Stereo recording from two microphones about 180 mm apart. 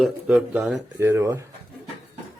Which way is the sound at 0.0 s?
5° right (ahead or behind).